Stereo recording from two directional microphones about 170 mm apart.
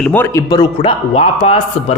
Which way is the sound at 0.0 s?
10° left (ahead or behind).